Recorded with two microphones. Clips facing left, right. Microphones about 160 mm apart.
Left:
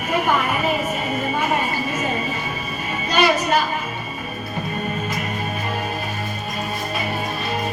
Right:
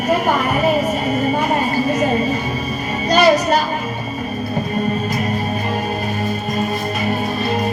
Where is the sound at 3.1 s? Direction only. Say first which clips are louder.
Right 5 dB; 40° right (ahead or behind).